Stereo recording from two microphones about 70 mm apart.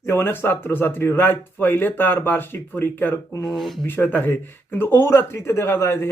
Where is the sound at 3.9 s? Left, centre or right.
Left.